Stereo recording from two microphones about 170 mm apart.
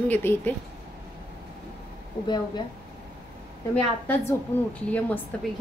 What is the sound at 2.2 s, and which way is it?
Speech, 25° left (ahead or behind).